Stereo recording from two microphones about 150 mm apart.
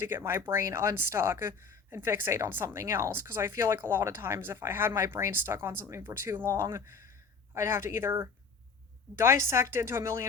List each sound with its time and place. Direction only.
0.0 s speech: 15° right (ahead or behind)